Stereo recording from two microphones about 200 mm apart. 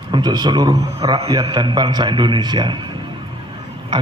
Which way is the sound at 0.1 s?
20° right (ahead or behind).